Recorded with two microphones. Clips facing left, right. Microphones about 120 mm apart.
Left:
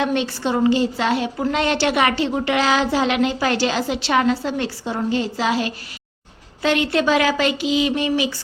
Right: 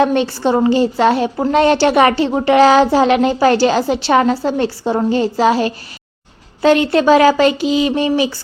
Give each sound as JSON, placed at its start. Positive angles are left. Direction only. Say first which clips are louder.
{"t": 0.0, "sound": "a woman's voice", "louder": "right 7 dB", "side_deg": -40}